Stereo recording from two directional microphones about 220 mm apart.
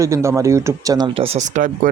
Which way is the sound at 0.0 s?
15° right (ahead or behind).